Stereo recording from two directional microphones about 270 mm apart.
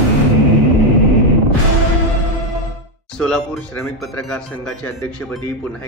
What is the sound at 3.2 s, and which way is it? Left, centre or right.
A man's voice, centre.